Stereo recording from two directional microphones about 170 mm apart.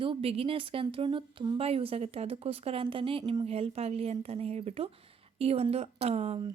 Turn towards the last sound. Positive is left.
turn(degrees=-35)  # may be behind; listen again after turning